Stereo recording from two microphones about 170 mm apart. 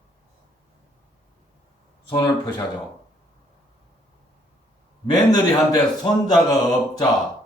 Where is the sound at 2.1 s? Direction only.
25° left (ahead or behind).